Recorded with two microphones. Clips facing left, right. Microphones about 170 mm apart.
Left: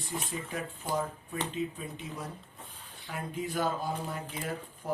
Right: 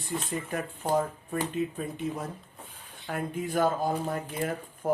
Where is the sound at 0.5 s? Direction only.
55° right (ahead or behind).